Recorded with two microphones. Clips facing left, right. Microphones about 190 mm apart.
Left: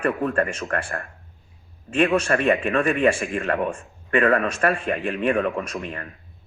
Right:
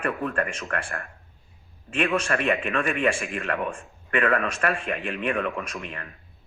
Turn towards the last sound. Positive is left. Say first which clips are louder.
# left 5 dB
turn(degrees=35)  # may be behind; listen again after turning